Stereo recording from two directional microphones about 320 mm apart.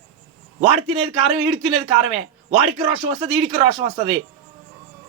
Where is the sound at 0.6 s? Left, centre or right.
Centre.